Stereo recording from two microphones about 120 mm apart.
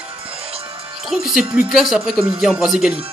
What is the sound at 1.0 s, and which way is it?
Speech, 5° right (ahead or behind).